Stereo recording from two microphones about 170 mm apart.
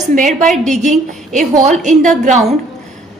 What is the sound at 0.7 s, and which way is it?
A woman's voice, 45° right (ahead or behind).